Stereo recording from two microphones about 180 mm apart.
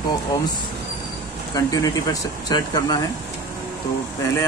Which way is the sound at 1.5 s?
20° left (ahead or behind).